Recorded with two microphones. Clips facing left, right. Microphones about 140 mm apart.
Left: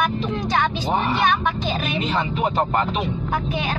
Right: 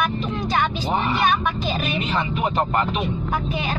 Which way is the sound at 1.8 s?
35° left (ahead or behind).